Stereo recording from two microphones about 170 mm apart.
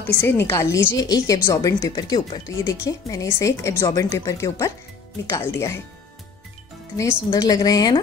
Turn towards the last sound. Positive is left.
turn(degrees=25)  # may be behind; listen again after turning